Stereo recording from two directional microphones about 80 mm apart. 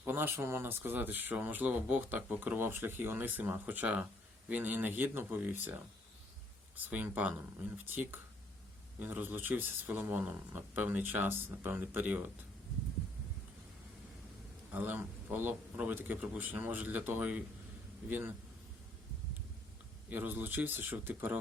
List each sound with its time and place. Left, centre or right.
0.0 s speech: right
14.7 s speech: right
20.1 s speech: right